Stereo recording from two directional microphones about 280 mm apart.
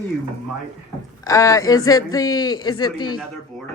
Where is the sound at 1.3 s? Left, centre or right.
Centre.